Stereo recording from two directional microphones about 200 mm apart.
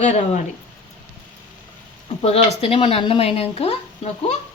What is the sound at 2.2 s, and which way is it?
Speech, 30° left (ahead or behind).